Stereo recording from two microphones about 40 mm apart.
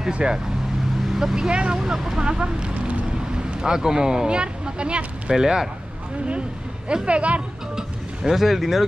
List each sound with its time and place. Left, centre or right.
0.1 s speech: right
1.0 s vehicle: centre
1.3 s speech: right
5.3 s speech: centre
6.9 s speech: right
7.7 s vehicle: centre